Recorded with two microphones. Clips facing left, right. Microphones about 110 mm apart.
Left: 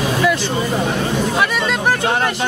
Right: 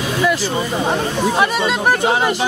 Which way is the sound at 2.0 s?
10° right (ahead or behind).